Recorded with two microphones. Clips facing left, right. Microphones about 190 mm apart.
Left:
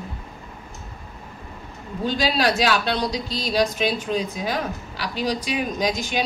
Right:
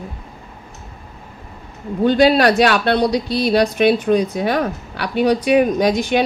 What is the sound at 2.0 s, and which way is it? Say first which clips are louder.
A woman's voice: right 9 dB; 60° right (ahead or behind).